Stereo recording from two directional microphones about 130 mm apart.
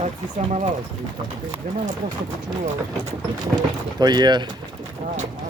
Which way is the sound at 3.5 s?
30° right (ahead or behind).